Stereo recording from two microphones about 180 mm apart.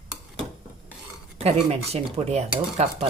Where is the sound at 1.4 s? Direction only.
35° right (ahead or behind).